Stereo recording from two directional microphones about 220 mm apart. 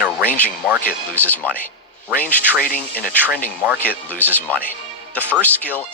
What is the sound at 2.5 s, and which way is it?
Speech, 40° left (ahead or behind).